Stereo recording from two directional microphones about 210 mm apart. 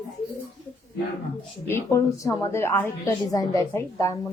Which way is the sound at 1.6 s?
10° left (ahead or behind).